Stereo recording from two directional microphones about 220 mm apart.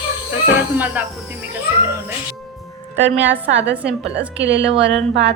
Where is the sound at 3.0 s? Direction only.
55° right (ahead or behind).